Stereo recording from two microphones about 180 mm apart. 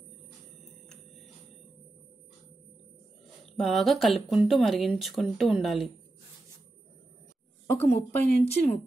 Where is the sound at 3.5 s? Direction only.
Centre (ahead or behind).